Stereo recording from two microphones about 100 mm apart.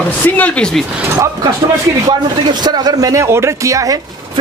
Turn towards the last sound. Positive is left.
turn(degrees=-35)  # may be behind; listen again after turning